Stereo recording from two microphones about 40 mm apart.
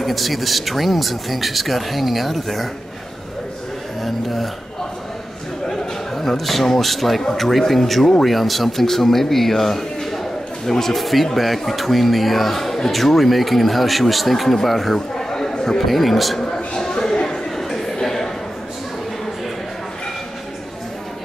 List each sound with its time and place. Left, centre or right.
0.0 s speech: centre
4.0 s speech: centre
5.7 s a man's voice: centre
15.0 s chatter: centre
15.8 s speech: centre
16.3 s a sound: centre